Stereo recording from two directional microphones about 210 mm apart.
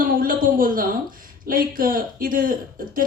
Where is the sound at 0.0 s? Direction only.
40° right (ahead or behind).